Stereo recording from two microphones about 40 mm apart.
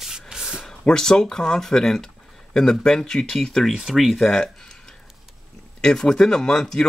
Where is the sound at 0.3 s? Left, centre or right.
Centre.